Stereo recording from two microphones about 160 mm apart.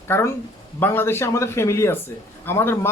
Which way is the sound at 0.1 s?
15° left (ahead or behind).